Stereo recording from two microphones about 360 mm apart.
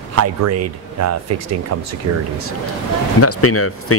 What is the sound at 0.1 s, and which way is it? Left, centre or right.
Speech, right.